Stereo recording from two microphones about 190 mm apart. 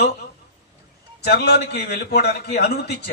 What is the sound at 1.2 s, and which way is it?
Speech, 60° left (ahead or behind).